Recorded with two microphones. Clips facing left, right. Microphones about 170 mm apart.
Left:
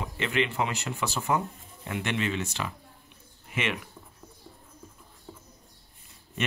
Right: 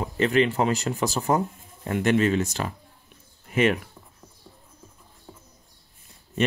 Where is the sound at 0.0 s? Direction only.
40° right (ahead or behind).